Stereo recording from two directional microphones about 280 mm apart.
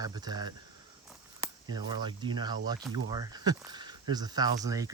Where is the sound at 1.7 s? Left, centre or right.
Centre.